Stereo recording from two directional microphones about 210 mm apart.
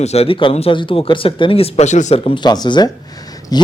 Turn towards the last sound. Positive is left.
turn(degrees=20)  # may be behind; listen again after turning